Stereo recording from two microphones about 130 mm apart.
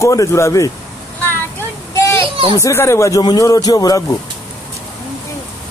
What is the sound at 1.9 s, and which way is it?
Children playing, 20° left (ahead or behind).